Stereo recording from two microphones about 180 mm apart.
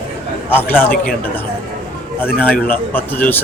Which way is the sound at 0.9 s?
55° left (ahead or behind).